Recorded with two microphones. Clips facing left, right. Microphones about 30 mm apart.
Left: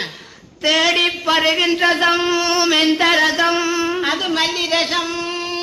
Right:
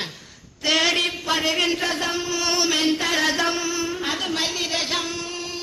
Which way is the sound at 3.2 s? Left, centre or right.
Centre.